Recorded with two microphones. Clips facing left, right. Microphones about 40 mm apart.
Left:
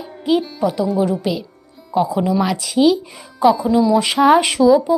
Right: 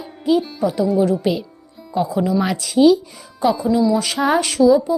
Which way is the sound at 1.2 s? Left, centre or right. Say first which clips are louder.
Right 2 dB; centre.